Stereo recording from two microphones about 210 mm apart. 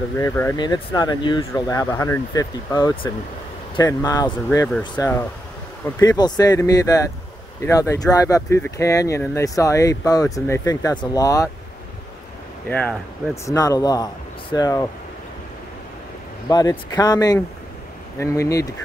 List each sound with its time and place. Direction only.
0.2 s speech: 15° left (ahead or behind)
12.6 s speech: 5° left (ahead or behind)
13.5 s speech: 15° left (ahead or behind)
16.4 s speech: 20° left (ahead or behind)